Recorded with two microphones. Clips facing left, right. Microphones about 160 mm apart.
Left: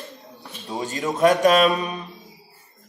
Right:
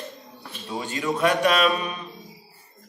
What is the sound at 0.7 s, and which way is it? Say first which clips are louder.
A man's voice: left 1 dB; 40° left (ahead or behind).